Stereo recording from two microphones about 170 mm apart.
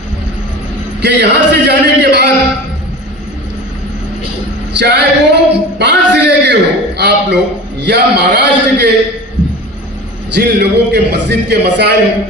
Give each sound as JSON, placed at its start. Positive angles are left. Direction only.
{"t": 1.0, "sound": "a man's voice", "side_deg": -85}
{"t": 4.8, "sound": "a sound", "side_deg": -85}
{"t": 7.8, "sound": "a man's voice", "side_deg": -80}
{"t": 10.3, "sound": "a man's voice", "side_deg": -80}